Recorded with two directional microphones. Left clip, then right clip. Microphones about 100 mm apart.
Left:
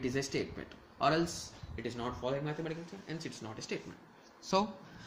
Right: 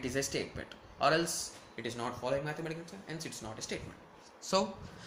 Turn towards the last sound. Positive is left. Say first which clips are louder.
# even
turn(degrees=35)  # may be behind; listen again after turning